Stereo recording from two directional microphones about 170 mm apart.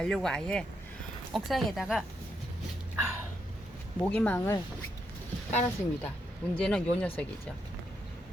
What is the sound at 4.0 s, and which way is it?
Speech, 10° left (ahead or behind).